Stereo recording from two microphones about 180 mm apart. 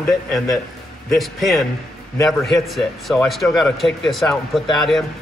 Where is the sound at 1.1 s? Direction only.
Centre (ahead or behind).